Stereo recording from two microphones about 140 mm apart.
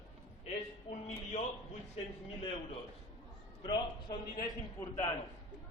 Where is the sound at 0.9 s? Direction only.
60° left (ahead or behind).